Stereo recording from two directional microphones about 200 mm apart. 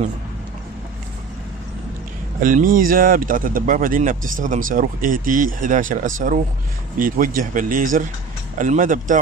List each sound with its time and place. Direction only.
2.4 s speech: 40° right (ahead or behind)